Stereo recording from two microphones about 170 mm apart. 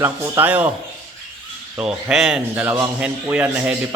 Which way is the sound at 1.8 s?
5° right (ahead or behind).